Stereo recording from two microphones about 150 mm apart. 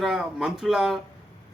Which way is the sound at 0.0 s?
5° right (ahead or behind).